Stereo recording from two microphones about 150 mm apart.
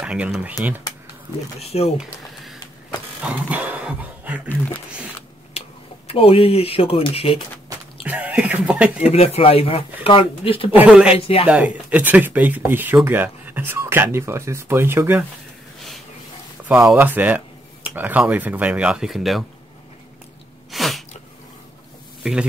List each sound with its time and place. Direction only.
0.0 s speech: 5° right (ahead or behind)
2.0 s a sound: 5° right (ahead or behind)
3.3 s dog: 10° right (ahead or behind)
4.5 s speech: 10° left (ahead or behind)
6.0 s speech: 40° left (ahead or behind)
8.0 s speech: 10° right (ahead or behind)
9.1 s speech: 40° left (ahead or behind)
10.7 s speech: 10° right (ahead or behind)
11.1 s speech: 40° left (ahead or behind)
11.4 s speech: 10° right (ahead or behind)
16.6 s a sound: 10° right (ahead or behind)
16.9 s speech: 10° right (ahead or behind)
20.7 s sneeze: centre (ahead or behind)
22.2 s speech: 5° right (ahead or behind)